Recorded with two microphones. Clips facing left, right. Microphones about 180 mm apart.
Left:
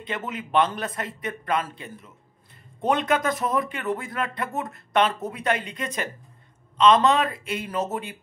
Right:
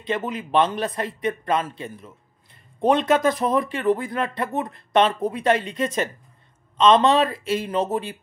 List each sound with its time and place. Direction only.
0.1 s speech: 25° right (ahead or behind)